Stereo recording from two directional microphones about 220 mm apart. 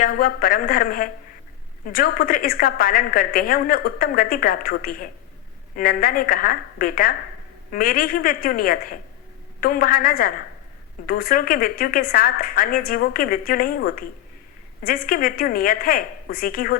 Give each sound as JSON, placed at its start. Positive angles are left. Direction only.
{"t": 0.0, "sound": "a woman's voice", "side_deg": 40}